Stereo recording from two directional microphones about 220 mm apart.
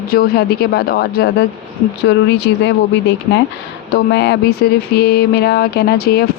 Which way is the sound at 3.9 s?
50° left (ahead or behind).